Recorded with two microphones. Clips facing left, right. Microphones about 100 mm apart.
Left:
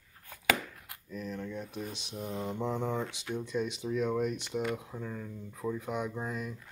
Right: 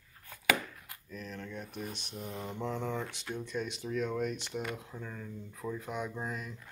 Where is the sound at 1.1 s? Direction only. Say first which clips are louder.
Left 5 dB; 5° left (ahead or behind).